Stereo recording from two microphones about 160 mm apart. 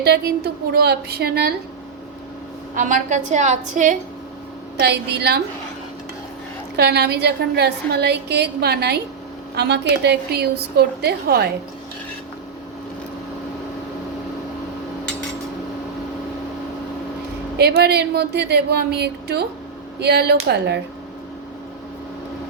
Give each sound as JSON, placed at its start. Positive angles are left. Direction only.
{"t": 0.0, "sound": "a woman's voice", "side_deg": -90}
{"t": 2.7, "sound": "a woman's voice", "side_deg": -55}
{"t": 4.8, "sound": "a woman's voice", "side_deg": -90}
{"t": 6.7, "sound": "a woman's voice", "side_deg": -90}
{"t": 17.6, "sound": "a woman's voice", "side_deg": -90}